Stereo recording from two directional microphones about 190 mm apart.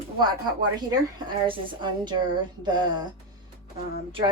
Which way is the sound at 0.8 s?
20° right (ahead or behind).